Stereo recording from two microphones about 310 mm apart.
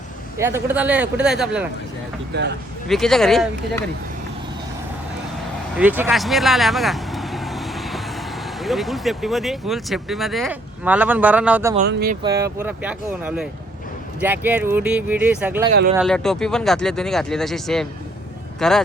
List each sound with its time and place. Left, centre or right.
0.3 s speech: centre
2.3 s speech: right
2.8 s speech: centre
5.7 s speech: centre
11.9 s speech: right
12.2 s speech: centre